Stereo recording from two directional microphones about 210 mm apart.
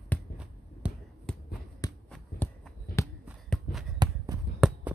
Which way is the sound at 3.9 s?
20° right (ahead or behind).